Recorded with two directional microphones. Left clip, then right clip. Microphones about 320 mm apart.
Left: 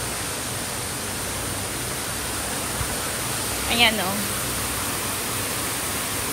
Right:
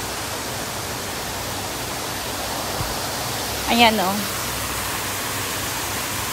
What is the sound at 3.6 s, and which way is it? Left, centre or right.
Speech, centre.